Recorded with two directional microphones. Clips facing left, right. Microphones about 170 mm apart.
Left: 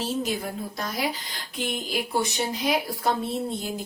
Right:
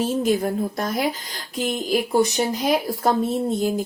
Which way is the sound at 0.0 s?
50° right (ahead or behind).